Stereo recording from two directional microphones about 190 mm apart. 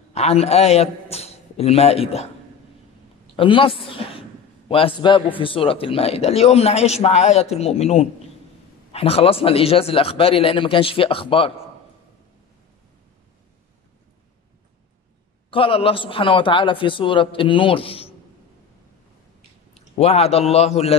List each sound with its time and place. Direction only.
0.1 s a man's voice: 35° left (ahead or behind)
3.3 s a man's voice: 25° left (ahead or behind)
15.5 s a man's voice: 30° left (ahead or behind)
20.0 s a man's voice: 35° left (ahead or behind)